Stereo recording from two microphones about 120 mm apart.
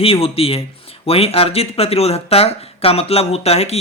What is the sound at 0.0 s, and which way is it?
Speech, 55° left (ahead or behind).